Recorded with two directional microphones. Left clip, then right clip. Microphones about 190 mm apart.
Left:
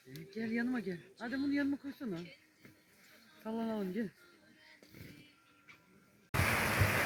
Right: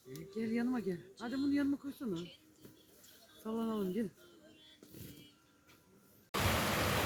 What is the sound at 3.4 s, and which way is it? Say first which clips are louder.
Speech: right 1 dB; 65° right (ahead or behind).